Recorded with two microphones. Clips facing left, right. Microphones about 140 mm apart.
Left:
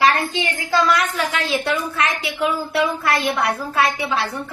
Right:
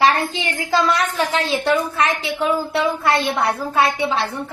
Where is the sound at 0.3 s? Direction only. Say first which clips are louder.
Even; 25° right (ahead or behind).